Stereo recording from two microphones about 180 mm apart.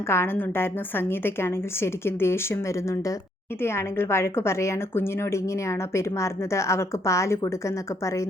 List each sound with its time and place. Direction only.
0.1 s a woman's voice: 10° left (ahead or behind)